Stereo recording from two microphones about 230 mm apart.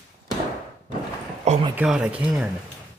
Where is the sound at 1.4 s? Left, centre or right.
Right.